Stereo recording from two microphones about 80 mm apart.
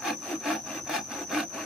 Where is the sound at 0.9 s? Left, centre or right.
Centre.